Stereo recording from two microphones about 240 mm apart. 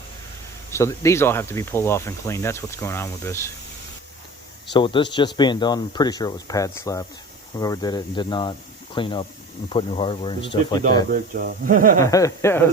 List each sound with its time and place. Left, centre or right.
0.7 s speech: centre
4.7 s speech: centre
11.1 s speech: right
11.9 s speech: centre